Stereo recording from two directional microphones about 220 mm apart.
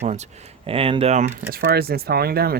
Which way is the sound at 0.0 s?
30° right (ahead or behind).